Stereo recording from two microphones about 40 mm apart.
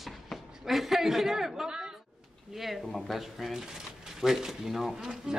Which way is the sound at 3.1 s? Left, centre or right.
Centre.